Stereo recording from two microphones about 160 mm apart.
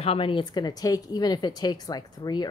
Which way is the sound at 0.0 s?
35° left (ahead or behind).